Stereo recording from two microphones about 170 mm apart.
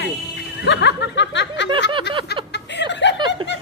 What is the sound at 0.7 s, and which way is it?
Snicker, 90° left.